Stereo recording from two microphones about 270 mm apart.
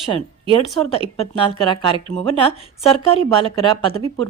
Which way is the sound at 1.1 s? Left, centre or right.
Left.